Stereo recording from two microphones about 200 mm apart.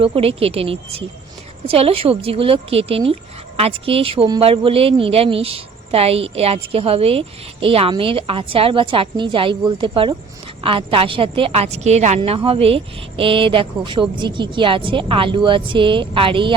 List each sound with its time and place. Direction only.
0.0 s a woman's voice: 30° right (ahead or behind)